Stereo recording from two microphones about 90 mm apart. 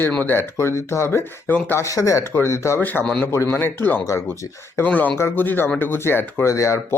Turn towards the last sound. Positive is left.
turn(degrees=35)  # may be behind; listen again after turning